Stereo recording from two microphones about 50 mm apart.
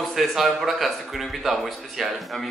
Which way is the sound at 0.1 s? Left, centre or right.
Centre.